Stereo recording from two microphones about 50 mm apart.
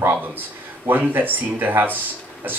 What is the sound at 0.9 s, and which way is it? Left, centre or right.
Speech, right.